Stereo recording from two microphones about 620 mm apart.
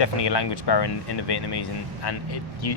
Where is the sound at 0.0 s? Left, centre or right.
Left.